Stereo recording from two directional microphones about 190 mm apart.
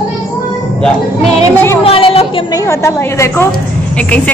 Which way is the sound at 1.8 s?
30° left (ahead or behind).